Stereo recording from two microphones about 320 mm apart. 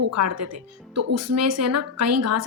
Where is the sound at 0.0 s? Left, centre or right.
Right.